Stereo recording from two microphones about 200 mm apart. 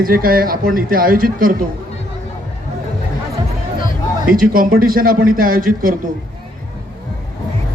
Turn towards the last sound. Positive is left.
turn(degrees=-45)  # may be behind; listen again after turning